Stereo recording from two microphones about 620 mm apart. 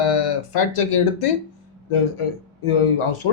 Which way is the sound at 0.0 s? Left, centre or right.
Left.